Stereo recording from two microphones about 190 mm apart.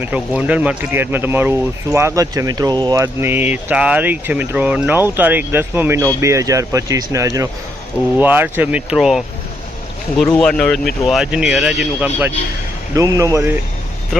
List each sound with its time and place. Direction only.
0.0 s speech: 5° right (ahead or behind)
10.3 s speech: 5° left (ahead or behind); by 13.6 s 15° right (ahead or behind)